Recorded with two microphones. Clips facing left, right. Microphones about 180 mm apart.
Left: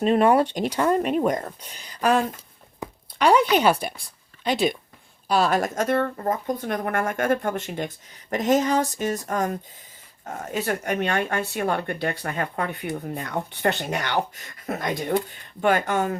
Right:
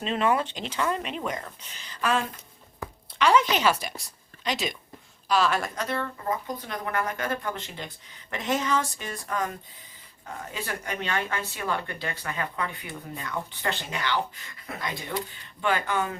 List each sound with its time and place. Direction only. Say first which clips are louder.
0.0 s speech: left 7 dB; 45° left (ahead or behind)
3.7 s speech: left 5 dB; 55° left (ahead or behind)
5.4 s speech: left 6 dB; 40° left (ahead or behind)